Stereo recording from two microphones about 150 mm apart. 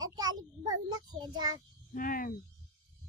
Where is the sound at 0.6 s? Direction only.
30° right (ahead or behind).